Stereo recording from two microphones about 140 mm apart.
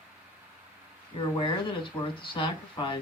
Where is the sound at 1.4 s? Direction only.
35° left (ahead or behind).